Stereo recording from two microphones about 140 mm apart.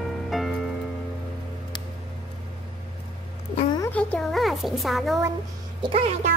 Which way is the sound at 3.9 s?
10° left (ahead or behind).